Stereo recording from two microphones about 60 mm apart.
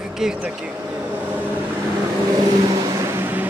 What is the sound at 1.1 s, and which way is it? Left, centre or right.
Vehicle, right.